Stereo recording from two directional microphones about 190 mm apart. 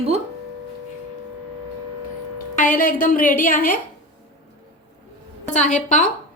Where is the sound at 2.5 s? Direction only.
45° left (ahead or behind).